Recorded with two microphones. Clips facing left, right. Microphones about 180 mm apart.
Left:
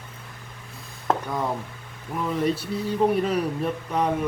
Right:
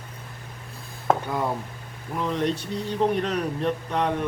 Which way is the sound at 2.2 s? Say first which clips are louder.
Left 1 dB; 5° left (ahead or behind).